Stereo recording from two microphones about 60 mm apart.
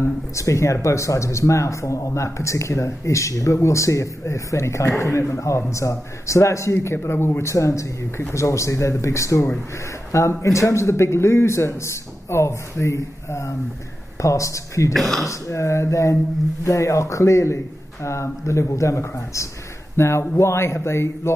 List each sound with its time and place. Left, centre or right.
0.0 s speech: left
7.5 s a man's voice: left
15.0 s speech: centre
15.2 s a man's voice: left